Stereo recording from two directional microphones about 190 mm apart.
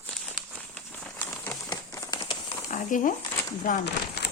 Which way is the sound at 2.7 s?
45° left (ahead or behind).